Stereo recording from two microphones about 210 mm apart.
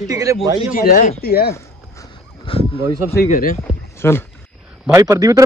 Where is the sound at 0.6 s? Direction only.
40° left (ahead or behind).